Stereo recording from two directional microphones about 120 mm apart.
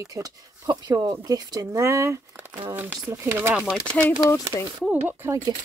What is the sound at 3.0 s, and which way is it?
Speech, 30° right (ahead or behind).